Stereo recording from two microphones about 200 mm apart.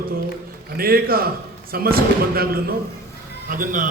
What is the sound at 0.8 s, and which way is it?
A man's voice, 50° right (ahead or behind).